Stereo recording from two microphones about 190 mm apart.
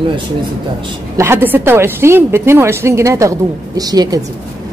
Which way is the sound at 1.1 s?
15° right (ahead or behind).